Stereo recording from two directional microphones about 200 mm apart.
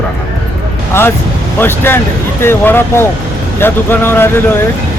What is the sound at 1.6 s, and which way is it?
Speech, 10° left (ahead or behind).